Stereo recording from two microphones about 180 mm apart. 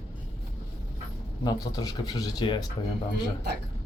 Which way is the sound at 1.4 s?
20° left (ahead or behind).